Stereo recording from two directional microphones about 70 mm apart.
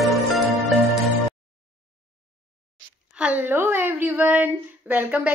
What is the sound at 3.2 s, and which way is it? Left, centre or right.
A woman's voice, right.